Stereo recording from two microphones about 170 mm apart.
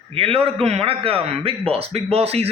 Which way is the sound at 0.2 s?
35° right (ahead or behind).